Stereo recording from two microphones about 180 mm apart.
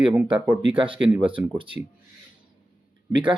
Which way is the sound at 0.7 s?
30° right (ahead or behind).